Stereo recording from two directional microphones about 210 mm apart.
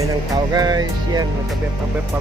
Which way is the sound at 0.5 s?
20° right (ahead or behind).